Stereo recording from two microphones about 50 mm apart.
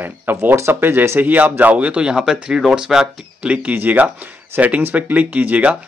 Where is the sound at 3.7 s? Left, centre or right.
Right.